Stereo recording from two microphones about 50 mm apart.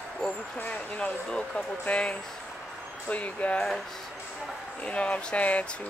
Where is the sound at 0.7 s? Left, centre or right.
Centre.